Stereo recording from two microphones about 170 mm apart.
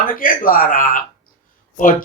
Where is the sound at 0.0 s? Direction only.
55° left (ahead or behind).